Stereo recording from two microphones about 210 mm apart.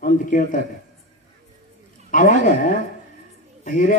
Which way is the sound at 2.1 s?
40° left (ahead or behind).